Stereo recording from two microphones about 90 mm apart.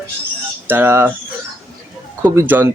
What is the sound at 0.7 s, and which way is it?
Speech, 25° right (ahead or behind).